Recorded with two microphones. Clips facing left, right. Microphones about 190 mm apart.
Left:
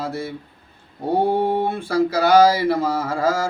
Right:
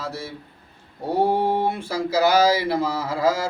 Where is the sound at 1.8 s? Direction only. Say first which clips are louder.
Left 4 dB; 55° left (ahead or behind).